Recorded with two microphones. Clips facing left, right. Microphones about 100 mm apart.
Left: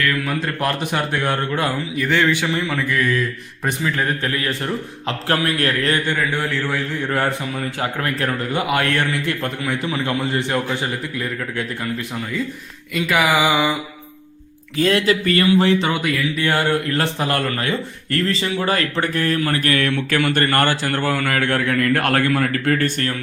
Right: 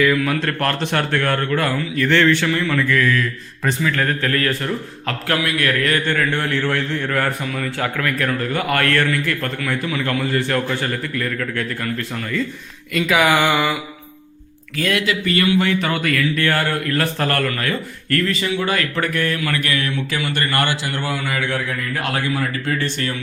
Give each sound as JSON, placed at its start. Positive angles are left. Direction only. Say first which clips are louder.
{"t": 0.3, "sound": "a man's voice", "louder": "right 1 dB", "side_deg": 5}
{"t": 5.4, "sound": "speech", "louder": "even", "side_deg": 35}
{"t": 6.1, "sound": "a man's voice", "louder": "right 1 dB", "side_deg": 15}
{"t": 7.1, "sound": "a man's voice", "louder": "left 3 dB", "side_deg": 25}
{"t": 12.9, "sound": "a sound", "louder": "right 2 dB", "side_deg": 0}
{"t": 14.8, "sound": "a man's voice", "louder": "left 3 dB", "side_deg": 35}
{"t": 19.8, "sound": "a man's voice", "louder": "left 4 dB", "side_deg": 55}